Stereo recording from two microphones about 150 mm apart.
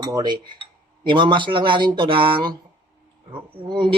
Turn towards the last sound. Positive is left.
turn(degrees=-35)  # may be behind; listen again after turning